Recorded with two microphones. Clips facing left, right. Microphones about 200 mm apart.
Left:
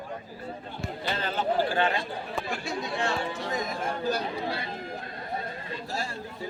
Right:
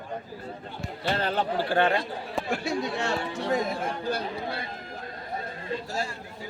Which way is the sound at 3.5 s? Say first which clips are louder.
Right 7 dB; 30° right (ahead or behind).